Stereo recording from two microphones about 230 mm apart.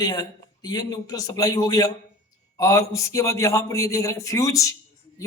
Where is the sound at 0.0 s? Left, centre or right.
Centre.